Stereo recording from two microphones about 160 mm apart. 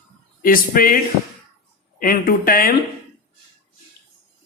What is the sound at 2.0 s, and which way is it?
Speech, 65° left (ahead or behind).